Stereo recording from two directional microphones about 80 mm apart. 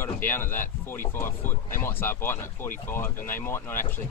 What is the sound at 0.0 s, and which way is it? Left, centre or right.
Speech, left.